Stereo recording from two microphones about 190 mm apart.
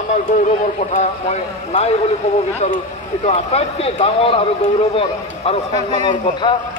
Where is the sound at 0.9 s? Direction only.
35° left (ahead or behind).